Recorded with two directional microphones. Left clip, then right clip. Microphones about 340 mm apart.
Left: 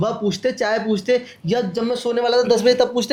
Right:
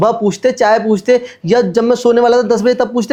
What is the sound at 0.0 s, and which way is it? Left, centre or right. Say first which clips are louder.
Speech: right 9 dB; right.